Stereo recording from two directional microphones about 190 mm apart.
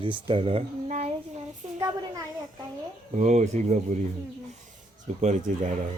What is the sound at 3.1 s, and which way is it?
Speech, 40° right (ahead or behind).